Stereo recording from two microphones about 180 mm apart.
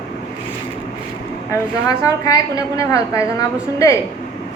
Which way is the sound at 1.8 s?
20° left (ahead or behind).